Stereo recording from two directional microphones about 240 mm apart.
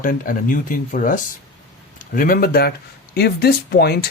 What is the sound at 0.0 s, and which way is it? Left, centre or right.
Speech, left.